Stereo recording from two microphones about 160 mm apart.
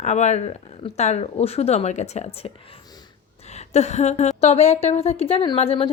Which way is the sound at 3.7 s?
45° left (ahead or behind).